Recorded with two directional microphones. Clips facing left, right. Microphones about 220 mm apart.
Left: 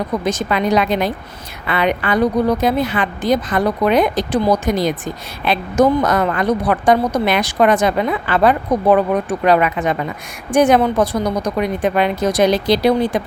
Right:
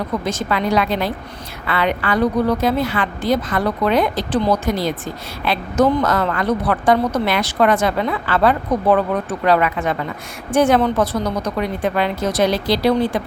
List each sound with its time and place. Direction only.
0.3 s a woman's voice: 20° left (ahead or behind)